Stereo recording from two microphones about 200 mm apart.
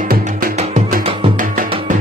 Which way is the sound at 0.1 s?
40° right (ahead or behind).